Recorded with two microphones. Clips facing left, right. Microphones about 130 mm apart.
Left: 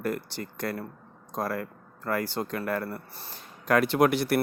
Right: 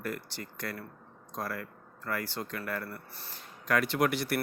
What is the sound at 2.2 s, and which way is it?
Speech, 25° left (ahead or behind).